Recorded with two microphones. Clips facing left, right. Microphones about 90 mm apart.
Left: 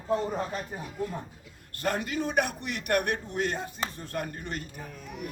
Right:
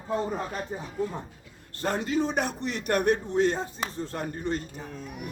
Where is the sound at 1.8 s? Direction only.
25° right (ahead or behind).